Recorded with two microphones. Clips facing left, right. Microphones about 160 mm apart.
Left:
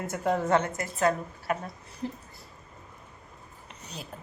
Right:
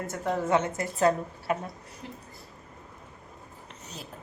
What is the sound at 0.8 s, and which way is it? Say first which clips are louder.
Speech: right 2 dB; 30° right (ahead or behind).